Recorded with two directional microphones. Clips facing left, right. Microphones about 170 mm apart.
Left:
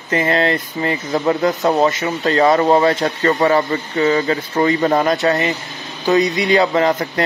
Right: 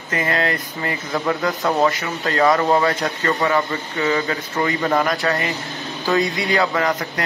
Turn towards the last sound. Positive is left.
turn(degrees=25)  # may be behind; listen again after turning